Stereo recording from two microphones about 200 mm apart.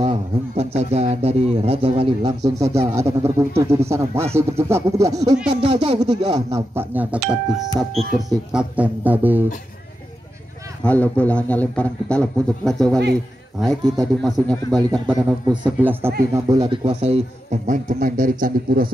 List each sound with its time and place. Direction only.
0.0 s a man's voice: 30° right (ahead or behind)
5.6 s speech: 30° right (ahead or behind)
6.7 s speech: 10° right (ahead or behind)
7.9 s speech: 30° right (ahead or behind)
8.5 s speech: 5° right (ahead or behind)
10.8 s a man's voice: 5° left (ahead or behind)
14.8 s speech: 20° right (ahead or behind)
15.8 s speech: 10° right (ahead or behind)
16.4 s a man's voice: 20° right (ahead or behind); by 18.9 s 45° right (ahead or behind)